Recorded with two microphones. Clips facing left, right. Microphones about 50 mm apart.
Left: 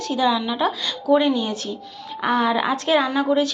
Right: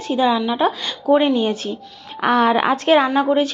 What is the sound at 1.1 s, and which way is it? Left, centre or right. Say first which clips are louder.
Speech: right 2 dB; right.